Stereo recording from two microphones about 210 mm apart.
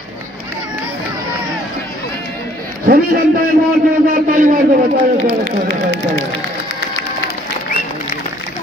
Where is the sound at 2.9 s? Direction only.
40° right (ahead or behind).